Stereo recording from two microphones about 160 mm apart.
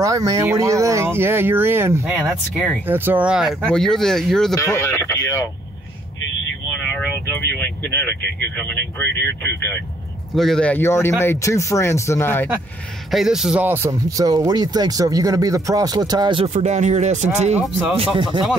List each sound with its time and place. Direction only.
0.0 s speech: 20° right (ahead or behind); by 4.6 s centre (ahead or behind)
4.6 s speech: 20° left (ahead or behind)
8.4 s speech: 10° left (ahead or behind)
13.1 s speech: centre (ahead or behind); by 16.4 s 25° right (ahead or behind)
16.4 s speech: 45° right (ahead or behind)
17.9 s speech: 35° right (ahead or behind)